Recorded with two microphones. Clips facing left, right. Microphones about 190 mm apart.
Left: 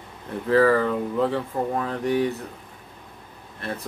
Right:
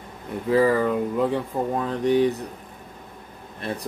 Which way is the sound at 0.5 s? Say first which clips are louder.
Even; 10° right (ahead or behind).